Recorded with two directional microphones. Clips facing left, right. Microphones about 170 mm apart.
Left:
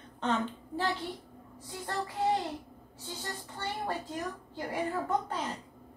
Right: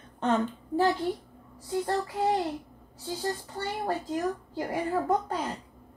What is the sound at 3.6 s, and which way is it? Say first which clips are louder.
Speech: right 4 dB; 40° right (ahead or behind).